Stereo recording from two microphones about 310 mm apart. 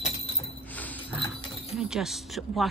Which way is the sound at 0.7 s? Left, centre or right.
Centre.